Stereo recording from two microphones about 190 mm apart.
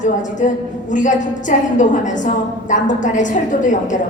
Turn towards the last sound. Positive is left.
turn(degrees=40)  # may be behind; listen again after turning